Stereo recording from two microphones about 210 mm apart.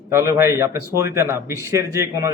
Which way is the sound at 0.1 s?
10° right (ahead or behind).